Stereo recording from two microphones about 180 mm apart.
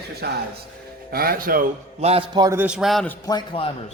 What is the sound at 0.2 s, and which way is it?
Speech, 65° right (ahead or behind).